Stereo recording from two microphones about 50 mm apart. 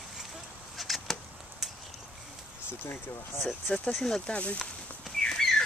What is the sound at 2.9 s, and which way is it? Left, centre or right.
Speech, left.